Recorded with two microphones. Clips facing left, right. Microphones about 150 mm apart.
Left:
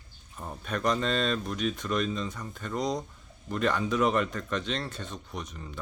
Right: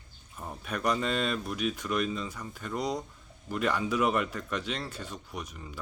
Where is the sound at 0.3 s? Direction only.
5° right (ahead or behind).